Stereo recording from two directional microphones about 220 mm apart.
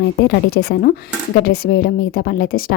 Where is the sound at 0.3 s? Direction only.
45° left (ahead or behind).